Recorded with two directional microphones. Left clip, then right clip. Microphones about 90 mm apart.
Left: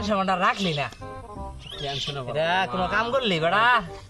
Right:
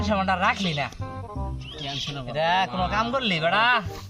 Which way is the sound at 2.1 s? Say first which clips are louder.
Right 1 dB; 35° left (ahead or behind).